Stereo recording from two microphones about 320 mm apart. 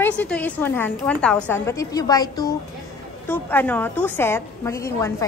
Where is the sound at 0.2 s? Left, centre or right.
Centre.